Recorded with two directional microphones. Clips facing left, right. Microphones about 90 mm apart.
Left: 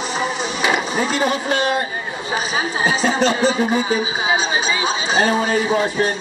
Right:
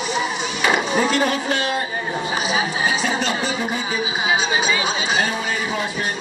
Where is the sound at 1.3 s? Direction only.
30° left (ahead or behind).